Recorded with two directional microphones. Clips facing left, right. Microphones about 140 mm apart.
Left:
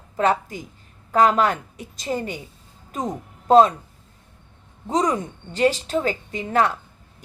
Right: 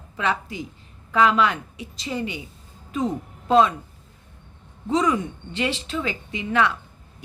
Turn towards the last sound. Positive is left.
turn(degrees=40)  # may be behind; listen again after turning